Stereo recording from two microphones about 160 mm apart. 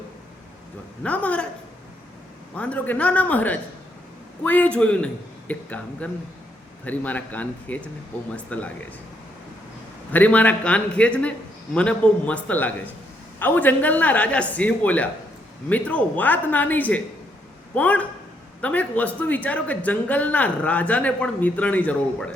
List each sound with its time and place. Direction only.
1.0 s speech: 10° left (ahead or behind)
2.6 s speech: 10° left (ahead or behind)
10.1 s speech: 10° left (ahead or behind)